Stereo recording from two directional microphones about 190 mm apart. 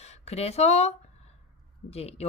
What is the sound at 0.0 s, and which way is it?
A woman's voice, 35° left (ahead or behind).